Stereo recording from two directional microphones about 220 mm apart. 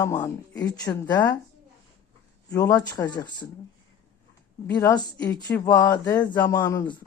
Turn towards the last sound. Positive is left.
turn(degrees=15)  # may be behind; listen again after turning